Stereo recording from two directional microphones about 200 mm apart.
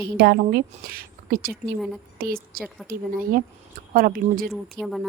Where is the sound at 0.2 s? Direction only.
55° right (ahead or behind).